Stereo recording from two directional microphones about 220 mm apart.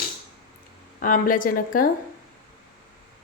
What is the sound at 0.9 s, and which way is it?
Speech, 40° left (ahead or behind).